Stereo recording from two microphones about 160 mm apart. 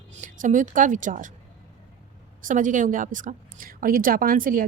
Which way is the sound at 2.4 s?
55° right (ahead or behind).